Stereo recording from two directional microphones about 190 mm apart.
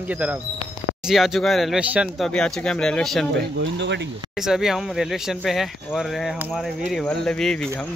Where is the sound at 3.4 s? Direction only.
70° right (ahead or behind).